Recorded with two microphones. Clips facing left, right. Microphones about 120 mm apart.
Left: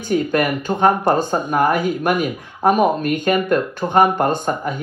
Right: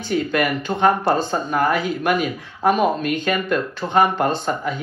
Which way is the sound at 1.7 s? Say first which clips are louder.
Left 2 dB; 50° left (ahead or behind).